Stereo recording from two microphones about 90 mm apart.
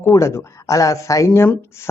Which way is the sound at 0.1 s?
30° left (ahead or behind).